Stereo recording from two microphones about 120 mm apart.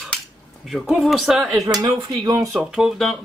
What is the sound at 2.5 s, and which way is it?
Speech, 5° right (ahead or behind).